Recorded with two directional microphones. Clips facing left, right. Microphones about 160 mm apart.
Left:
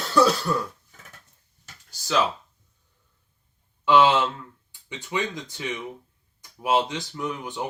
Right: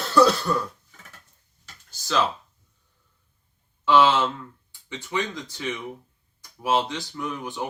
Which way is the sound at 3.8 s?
20° left (ahead or behind).